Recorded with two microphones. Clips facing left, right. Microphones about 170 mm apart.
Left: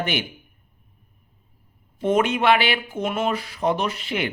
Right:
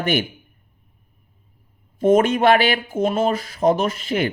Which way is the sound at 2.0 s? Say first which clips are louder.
Right 5 dB; 45° right (ahead or behind).